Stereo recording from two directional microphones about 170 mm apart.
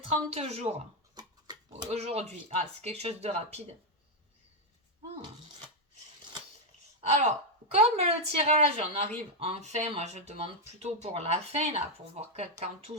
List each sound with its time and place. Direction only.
0.3 s speech: 40° right (ahead or behind)
1.8 s speech: 40° right (ahead or behind)
7.1 s speech: 40° right (ahead or behind)